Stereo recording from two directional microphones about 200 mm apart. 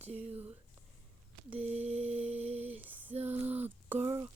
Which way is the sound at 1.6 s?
30° right (ahead or behind).